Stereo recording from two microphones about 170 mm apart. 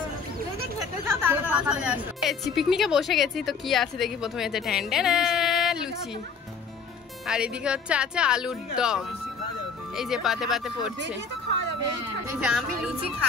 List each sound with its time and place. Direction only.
1.0 s music: 15° right (ahead or behind)
2.5 s a woman's voice: centre (ahead or behind)
7.2 s a woman's voice: 5° right (ahead or behind)
11.0 s speech: 90° right
12.4 s a woman's voice: 5° right (ahead or behind)